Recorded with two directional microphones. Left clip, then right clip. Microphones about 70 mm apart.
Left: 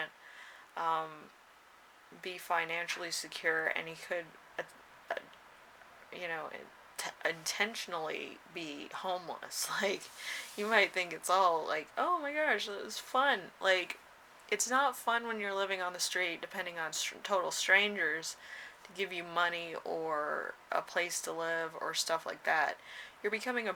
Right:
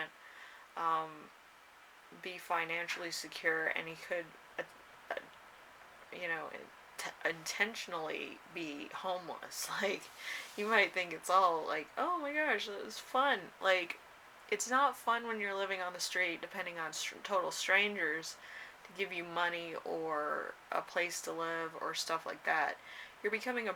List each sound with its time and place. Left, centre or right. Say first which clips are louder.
0.8 s speech: left 1 dB; left
2.2 s speech: left 2 dB; left
5.1 s a sound: left 2 dB; left
6.1 s speech: even; left